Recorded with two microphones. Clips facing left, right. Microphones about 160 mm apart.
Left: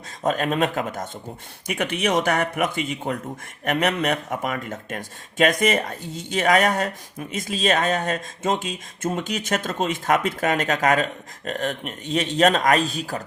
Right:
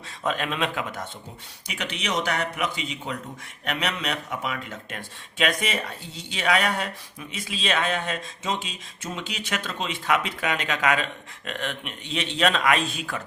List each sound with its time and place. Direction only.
0.2 s speech: 45° left (ahead or behind)